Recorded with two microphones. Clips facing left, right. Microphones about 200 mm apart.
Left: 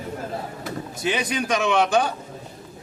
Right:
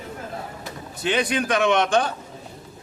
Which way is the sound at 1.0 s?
10° left (ahead or behind).